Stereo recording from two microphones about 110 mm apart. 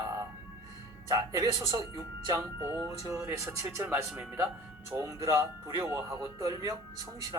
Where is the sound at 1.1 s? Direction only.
30° right (ahead or behind).